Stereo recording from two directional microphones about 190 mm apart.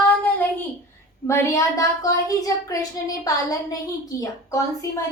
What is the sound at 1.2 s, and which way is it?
A woman's voice, 15° left (ahead or behind).